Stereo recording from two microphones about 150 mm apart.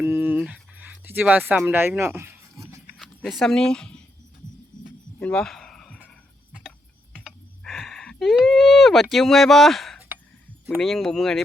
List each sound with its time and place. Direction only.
0.0 s a sound: 10° right (ahead or behind)
3.0 s speech: centre (ahead or behind)
4.8 s music: 5° left (ahead or behind)
6.6 s typing: 5° left (ahead or behind)
10.8 s speech: centre (ahead or behind)